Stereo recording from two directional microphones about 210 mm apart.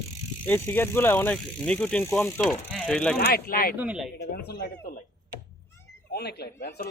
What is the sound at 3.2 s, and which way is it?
Speech, 45° left (ahead or behind).